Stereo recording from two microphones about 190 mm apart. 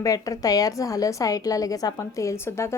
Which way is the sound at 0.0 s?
15° left (ahead or behind).